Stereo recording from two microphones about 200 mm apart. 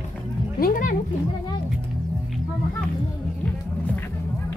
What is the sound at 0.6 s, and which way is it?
Music, 45° left (ahead or behind).